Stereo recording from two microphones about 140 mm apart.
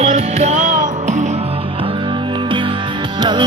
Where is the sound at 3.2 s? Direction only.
35° right (ahead or behind).